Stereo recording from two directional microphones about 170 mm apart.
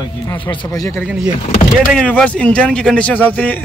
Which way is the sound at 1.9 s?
5° left (ahead or behind).